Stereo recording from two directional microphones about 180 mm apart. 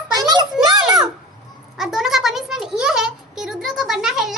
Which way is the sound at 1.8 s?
Centre (ahead or behind).